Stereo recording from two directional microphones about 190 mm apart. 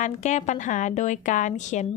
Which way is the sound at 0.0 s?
40° left (ahead or behind).